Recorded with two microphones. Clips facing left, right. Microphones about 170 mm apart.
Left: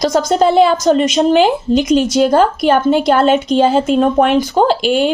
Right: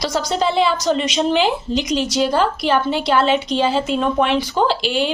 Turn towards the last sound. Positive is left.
turn(degrees=50)  # may be behind; listen again after turning